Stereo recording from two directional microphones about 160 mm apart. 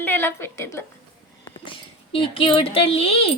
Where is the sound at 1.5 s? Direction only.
35° left (ahead or behind).